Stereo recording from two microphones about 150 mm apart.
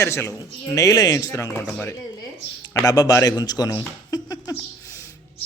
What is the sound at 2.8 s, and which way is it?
Speech, 25° left (ahead or behind).